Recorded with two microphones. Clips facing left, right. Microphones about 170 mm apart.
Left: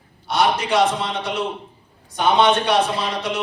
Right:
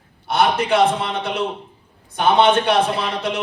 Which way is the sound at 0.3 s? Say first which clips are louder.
Right 2 dB; 55° right (ahead or behind).